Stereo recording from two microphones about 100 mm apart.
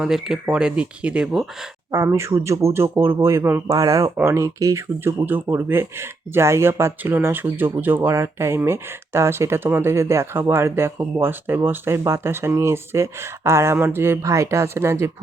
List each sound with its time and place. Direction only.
0.0 s speech: 5° right (ahead or behind)
1.9 s speech: 30° right (ahead or behind)
3.8 s speech: 35° right (ahead or behind)
5.2 s speech: 20° right (ahead or behind)